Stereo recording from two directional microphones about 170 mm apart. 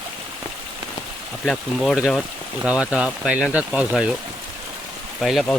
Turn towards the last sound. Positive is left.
turn(degrees=0)  # may be behind; listen again after turning